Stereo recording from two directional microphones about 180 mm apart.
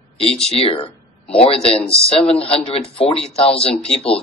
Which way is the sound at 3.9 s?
5° left (ahead or behind).